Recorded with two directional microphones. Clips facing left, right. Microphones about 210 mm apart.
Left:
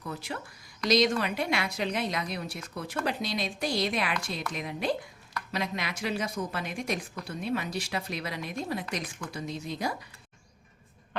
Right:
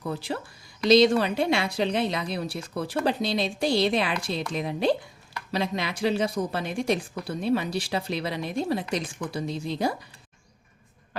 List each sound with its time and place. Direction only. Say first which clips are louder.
0.1 s a woman's voice: right 5 dB; 30° right (ahead or behind)